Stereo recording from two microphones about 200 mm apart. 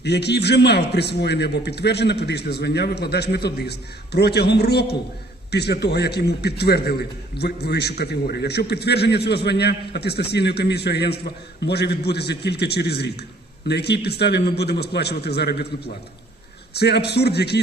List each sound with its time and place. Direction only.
0.0 s a man's voice: 55° left (ahead or behind)
16.7 s a man's voice: 55° left (ahead or behind)